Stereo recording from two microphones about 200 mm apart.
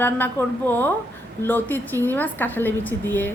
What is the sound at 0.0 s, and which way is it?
A woman's voice, 10° left (ahead or behind).